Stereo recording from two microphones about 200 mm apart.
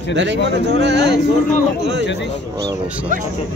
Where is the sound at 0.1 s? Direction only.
60° right (ahead or behind).